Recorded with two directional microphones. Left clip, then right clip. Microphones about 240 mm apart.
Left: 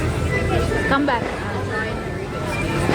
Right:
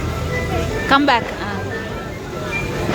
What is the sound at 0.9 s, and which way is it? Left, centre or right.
Music, right.